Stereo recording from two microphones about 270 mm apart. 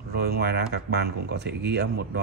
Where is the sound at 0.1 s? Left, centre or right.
Right.